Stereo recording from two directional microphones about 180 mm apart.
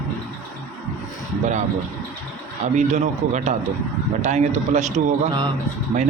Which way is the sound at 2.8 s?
40° right (ahead or behind).